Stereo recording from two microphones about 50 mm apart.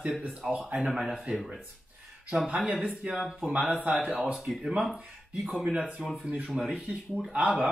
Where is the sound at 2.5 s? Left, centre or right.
Right.